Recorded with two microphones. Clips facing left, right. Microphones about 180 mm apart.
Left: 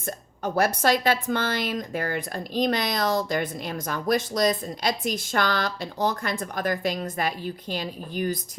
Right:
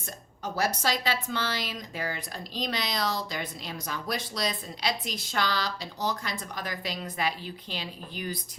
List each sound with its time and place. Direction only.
0.0 s speech: 55° left (ahead or behind)